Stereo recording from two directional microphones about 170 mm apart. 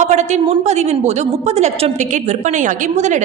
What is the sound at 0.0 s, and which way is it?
A woman's voice, 40° right (ahead or behind).